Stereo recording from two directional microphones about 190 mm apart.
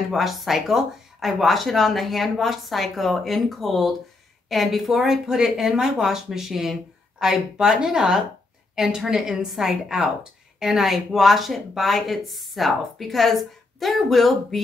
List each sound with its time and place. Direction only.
0.1 s speech: centre (ahead or behind)